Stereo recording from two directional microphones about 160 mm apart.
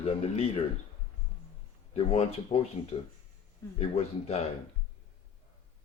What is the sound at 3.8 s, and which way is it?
Speech, 40° left (ahead or behind).